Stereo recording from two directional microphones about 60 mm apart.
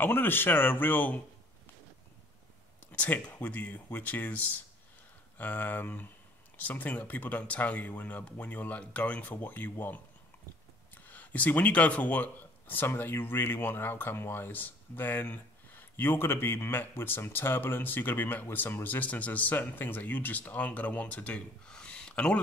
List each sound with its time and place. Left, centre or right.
0.0 s speech: left
2.9 s speech: left
18.9 s speech: left